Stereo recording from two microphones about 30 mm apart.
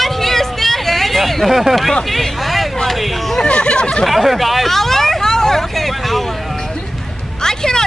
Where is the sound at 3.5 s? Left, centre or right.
Left.